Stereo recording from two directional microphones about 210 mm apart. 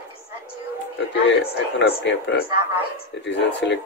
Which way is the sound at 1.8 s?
55° left (ahead or behind).